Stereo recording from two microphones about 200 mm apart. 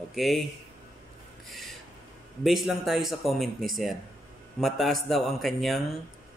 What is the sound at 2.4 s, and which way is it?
Speech, centre (ahead or behind).